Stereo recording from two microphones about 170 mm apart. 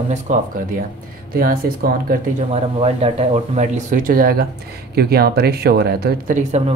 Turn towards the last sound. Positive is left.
turn(degrees=-40)  # may be behind; listen again after turning